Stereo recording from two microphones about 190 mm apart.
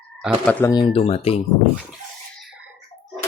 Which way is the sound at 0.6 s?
20° left (ahead or behind).